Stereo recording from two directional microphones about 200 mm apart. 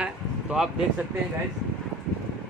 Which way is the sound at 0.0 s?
5° right (ahead or behind).